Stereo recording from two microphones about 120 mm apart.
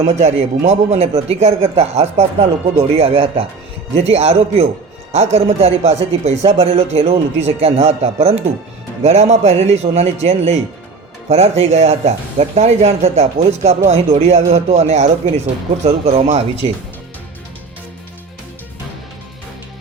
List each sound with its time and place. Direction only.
0.0 s speech: 70° right (ahead or behind)
9.0 s speech: 70° right (ahead or behind)